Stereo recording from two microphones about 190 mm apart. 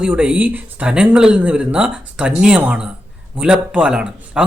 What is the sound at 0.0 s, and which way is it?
Speech, 5° right (ahead or behind).